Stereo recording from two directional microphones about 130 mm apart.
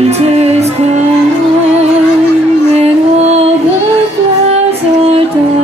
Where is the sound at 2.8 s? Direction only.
55° right (ahead or behind).